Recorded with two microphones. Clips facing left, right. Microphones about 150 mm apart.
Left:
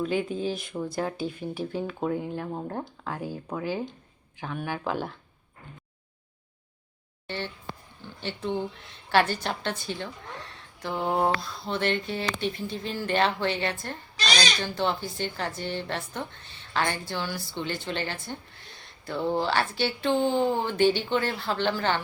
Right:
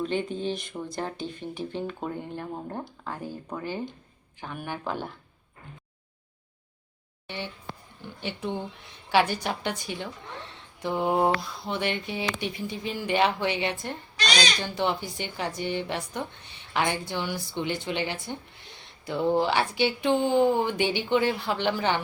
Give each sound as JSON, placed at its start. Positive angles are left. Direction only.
{"t": 0.0, "sound": "speech", "side_deg": 5}
{"t": 7.3, "sound": "speech", "side_deg": -15}